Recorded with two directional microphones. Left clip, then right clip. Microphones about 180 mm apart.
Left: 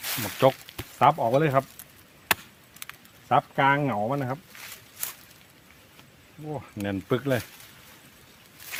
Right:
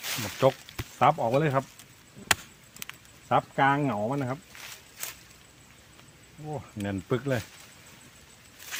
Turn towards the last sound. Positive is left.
turn(degrees=70)  # may be behind; listen again after turning